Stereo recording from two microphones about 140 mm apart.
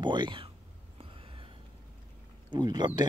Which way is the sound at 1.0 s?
40° right (ahead or behind).